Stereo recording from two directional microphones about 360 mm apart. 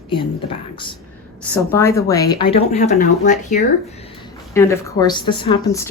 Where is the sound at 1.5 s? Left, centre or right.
Centre.